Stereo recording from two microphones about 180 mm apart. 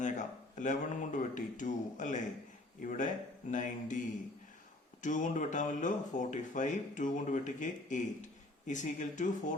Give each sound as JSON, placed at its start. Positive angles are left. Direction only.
{"t": 0.0, "sound": "speech", "side_deg": 45}
{"t": 5.0, "sound": "speech", "side_deg": 45}